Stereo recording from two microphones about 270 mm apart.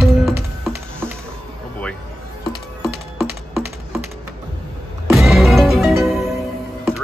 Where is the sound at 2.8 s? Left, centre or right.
Centre.